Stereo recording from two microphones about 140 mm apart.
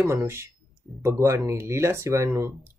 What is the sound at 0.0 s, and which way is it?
Speech, 20° right (ahead or behind).